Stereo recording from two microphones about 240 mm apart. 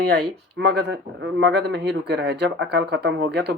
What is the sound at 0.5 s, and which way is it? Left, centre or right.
Speech, right.